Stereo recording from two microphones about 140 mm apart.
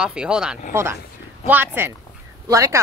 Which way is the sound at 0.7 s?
20° right (ahead or behind).